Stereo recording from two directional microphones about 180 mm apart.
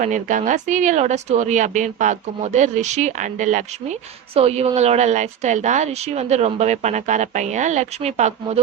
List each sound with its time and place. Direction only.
0.0 s a woman's voice: 45° right (ahead or behind)